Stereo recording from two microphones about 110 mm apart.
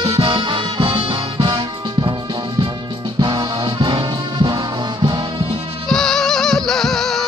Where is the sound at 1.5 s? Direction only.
40° right (ahead or behind).